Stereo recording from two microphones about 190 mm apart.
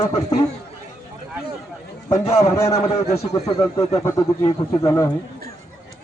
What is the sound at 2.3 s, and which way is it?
Speech, 15° left (ahead or behind).